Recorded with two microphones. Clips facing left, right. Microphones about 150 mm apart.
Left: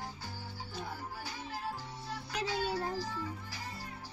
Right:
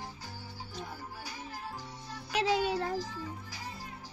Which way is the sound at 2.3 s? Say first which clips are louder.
Right 6 dB; 80° right.